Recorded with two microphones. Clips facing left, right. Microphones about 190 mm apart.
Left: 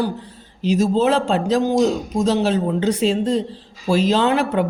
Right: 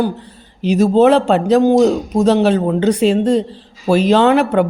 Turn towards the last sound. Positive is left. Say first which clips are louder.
# right 6 dB
turn(degrees=-65)  # may be behind; listen again after turning